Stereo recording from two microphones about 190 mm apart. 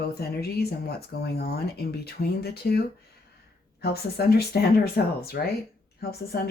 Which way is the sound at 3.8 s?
55° left (ahead or behind).